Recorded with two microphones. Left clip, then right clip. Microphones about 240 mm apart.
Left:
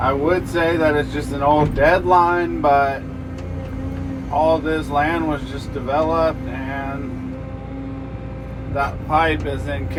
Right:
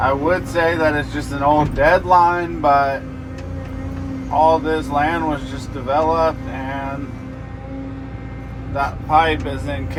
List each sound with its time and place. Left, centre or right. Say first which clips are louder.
0.0 s speech: right 1 dB; right
4.4 s speech: right 3 dB; right
8.7 s speech: right 3 dB; right